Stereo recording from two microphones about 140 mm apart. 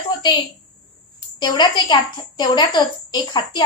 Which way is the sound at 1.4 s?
35° left (ahead or behind).